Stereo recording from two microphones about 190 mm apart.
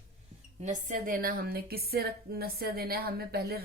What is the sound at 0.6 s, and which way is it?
Speech, 40° right (ahead or behind).